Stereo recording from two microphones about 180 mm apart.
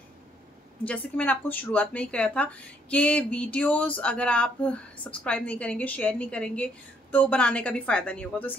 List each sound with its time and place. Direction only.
0.8 s speech: 10° left (ahead or behind)